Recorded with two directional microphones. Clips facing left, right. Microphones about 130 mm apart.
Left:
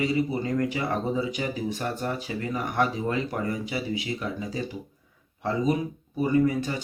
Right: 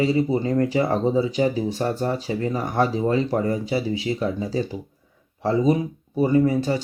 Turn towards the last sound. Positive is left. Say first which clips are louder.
# right 4 dB
turn(degrees=-30)  # may be behind; listen again after turning